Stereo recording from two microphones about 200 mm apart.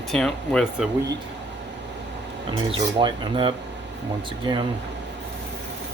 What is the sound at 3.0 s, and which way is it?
Speech, 25° right (ahead or behind).